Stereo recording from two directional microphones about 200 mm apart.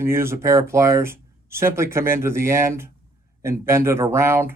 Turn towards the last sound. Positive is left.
turn(degrees=-10)  # may be behind; listen again after turning